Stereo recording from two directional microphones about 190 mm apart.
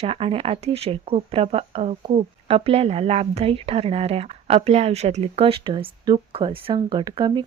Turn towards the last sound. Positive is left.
turn(degrees=-25)  # may be behind; listen again after turning